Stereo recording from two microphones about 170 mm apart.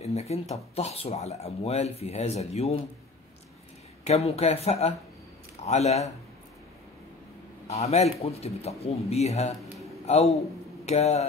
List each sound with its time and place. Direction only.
0.0 s speech: 40° left (ahead or behind)
4.0 s speech: 40° left (ahead or behind)
7.6 s speech: 40° left (ahead or behind)
10.9 s speech: 40° left (ahead or behind)